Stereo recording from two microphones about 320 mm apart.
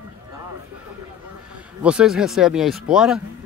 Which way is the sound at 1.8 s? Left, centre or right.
Centre.